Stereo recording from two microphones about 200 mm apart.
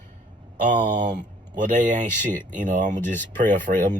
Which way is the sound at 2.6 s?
40° right (ahead or behind).